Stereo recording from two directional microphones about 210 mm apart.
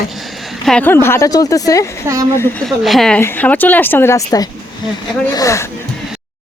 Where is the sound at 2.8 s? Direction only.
Centre (ahead or behind).